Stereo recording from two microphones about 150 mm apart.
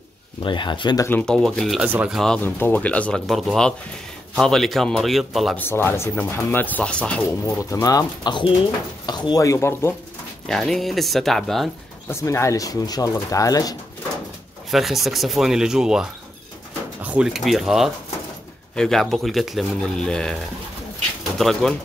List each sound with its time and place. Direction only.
0.4 s speech: 30° left (ahead or behind)
1.0 s speech: 10° left (ahead or behind)
5.6 s speech: 15° left (ahead or behind)
7.4 s speech: 20° left (ahead or behind)
10.5 s speech: centre (ahead or behind)
12.1 s speech: 20° left (ahead or behind)
14.7 s speech: centre (ahead or behind)
21.4 s speech: centre (ahead or behind)